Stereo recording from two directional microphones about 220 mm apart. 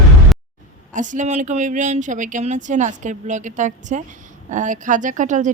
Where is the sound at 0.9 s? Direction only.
35° right (ahead or behind).